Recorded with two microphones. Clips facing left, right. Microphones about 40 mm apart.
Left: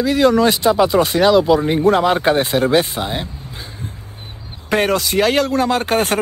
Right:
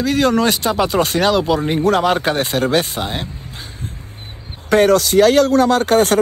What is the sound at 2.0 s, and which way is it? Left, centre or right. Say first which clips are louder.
Speech: left 1 dB; centre.